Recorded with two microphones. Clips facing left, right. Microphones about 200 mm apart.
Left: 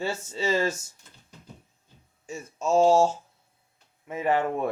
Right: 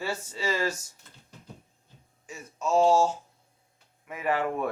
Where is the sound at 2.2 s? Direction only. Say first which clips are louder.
Left 3 dB; 25° left (ahead or behind).